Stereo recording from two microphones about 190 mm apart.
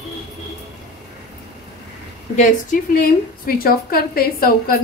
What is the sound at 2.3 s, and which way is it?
A woman's voice, 40° left (ahead or behind).